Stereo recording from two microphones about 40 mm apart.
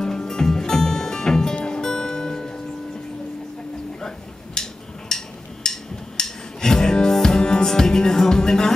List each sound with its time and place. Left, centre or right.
0.0 s music: centre
1.5 s music: left
1.8 s music: centre
4.6 s a sound: centre
5.1 s music: centre